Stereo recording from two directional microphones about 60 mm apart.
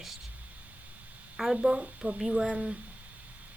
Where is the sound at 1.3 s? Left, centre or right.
Centre.